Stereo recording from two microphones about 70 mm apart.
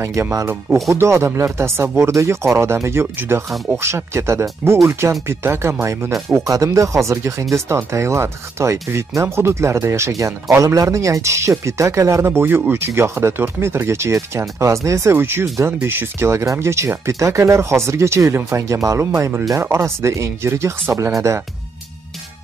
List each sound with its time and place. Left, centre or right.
0.8 s speech: right
6.1 s speech: centre
6.4 s speech: right
15.1 s speech: right